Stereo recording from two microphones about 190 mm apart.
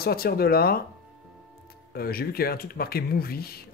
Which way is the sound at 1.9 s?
55° left (ahead or behind).